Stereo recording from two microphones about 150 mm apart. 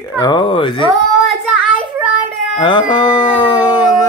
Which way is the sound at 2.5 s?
30° left (ahead or behind).